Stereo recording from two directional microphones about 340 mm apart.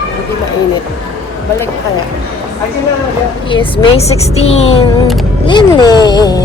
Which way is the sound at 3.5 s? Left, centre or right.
Centre.